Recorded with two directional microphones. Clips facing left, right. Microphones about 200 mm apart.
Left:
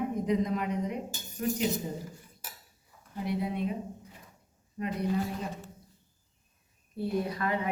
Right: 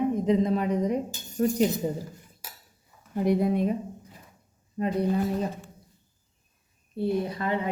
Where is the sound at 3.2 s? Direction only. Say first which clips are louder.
Right 8 dB; 45° right (ahead or behind).